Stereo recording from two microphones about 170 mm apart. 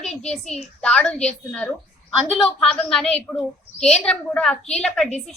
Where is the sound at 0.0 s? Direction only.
40° left (ahead or behind).